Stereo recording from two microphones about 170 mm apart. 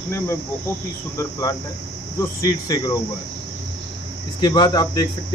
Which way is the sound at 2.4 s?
20° left (ahead or behind).